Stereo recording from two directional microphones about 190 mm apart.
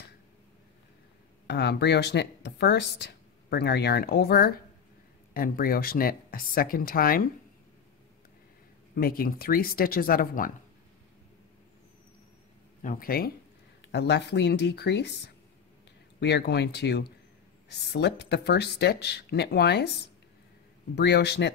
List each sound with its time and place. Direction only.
1.5 s speech: 60° left (ahead or behind)
9.0 s speech: 50° left (ahead or behind)
12.8 s speech: 50° left (ahead or behind)
13.9 s speech: 65° left (ahead or behind)
20.9 s speech: 65° left (ahead or behind)